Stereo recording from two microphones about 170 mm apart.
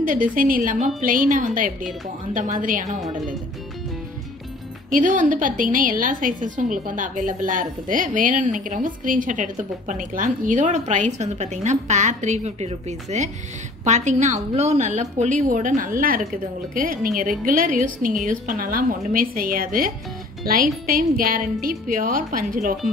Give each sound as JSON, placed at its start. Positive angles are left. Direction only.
{"t": 0.0, "sound": "a woman's voice", "side_deg": -55}
{"t": 4.9, "sound": "a woman's voice", "side_deg": -50}